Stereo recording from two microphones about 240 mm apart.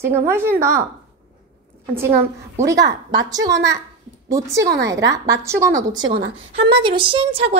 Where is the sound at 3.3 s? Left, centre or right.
Centre.